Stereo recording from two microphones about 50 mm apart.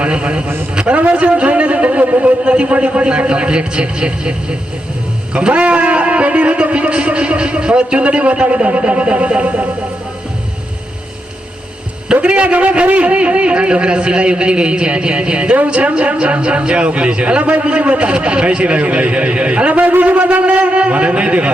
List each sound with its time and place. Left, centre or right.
0.0 s speech: right
12.2 s speech: right